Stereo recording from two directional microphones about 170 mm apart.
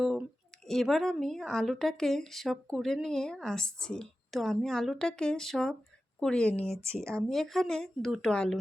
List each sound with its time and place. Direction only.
0.0 s a sound: centre (ahead or behind)
0.7 s a woman's voice: centre (ahead or behind)
7.0 s speech: 15° right (ahead or behind)
7.3 s a woman's voice: centre (ahead or behind)